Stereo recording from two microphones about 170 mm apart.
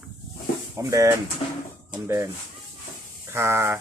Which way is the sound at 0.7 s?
20° right (ahead or behind).